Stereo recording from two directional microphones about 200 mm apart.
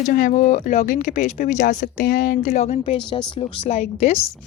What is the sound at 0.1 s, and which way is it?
Speech, 45° left (ahead or behind).